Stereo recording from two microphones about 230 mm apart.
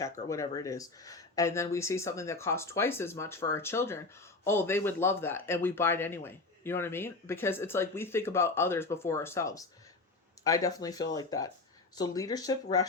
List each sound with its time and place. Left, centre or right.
0.3 s speech: centre